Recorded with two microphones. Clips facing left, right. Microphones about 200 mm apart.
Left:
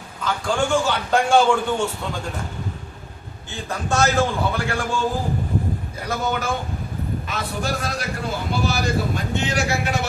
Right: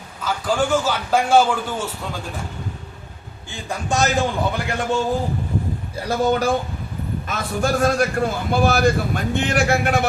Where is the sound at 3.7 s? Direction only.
15° right (ahead or behind).